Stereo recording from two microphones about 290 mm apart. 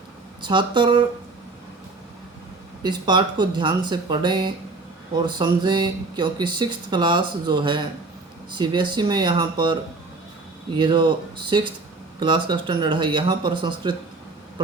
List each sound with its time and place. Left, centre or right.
0.4 s speech: centre
2.8 s speech: centre
10.8 s speech: centre